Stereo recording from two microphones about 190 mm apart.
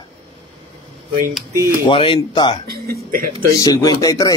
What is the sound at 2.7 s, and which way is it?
Speech, 50° right (ahead or behind).